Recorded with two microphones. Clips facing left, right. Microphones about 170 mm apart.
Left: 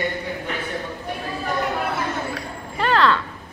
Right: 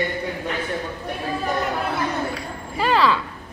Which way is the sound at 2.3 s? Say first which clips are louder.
Right 1 dB; 5° right (ahead or behind).